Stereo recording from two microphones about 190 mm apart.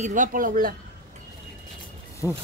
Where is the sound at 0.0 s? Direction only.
45° right (ahead or behind).